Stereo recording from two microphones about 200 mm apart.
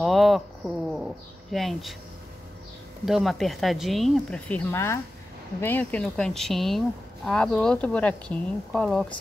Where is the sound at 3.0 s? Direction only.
Centre (ahead or behind).